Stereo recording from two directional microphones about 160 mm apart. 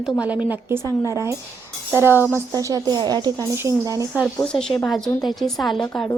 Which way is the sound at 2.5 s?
25° right (ahead or behind).